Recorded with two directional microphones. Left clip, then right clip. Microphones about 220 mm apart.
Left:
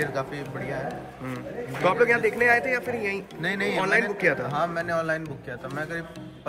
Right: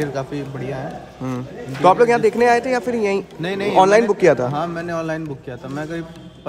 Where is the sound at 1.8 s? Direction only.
10° right (ahead or behind).